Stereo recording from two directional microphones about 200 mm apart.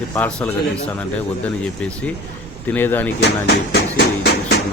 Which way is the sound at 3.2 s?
55° left (ahead or behind).